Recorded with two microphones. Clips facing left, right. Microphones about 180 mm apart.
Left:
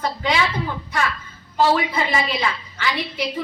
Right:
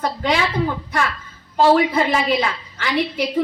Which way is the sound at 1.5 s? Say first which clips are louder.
Right 4 dB; 55° right (ahead or behind).